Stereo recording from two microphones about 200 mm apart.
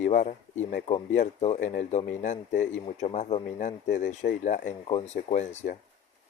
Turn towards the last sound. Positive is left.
turn(degrees=35)  # may be behind; listen again after turning